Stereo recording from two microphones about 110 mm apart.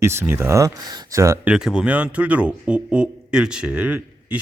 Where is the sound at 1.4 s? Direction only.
5° right (ahead or behind).